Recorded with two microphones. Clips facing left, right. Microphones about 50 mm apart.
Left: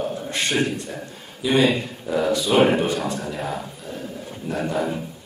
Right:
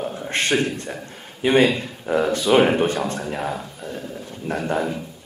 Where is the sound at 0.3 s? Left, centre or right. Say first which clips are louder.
Right 6 dB; right.